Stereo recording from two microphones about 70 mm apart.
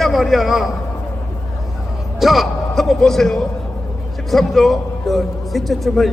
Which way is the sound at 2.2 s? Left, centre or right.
Centre.